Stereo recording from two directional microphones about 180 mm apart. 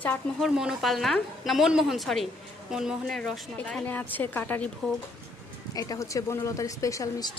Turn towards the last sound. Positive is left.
turn(degrees=20)  # may be behind; listen again after turning